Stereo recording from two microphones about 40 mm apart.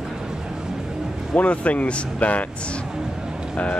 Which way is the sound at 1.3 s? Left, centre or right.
Left.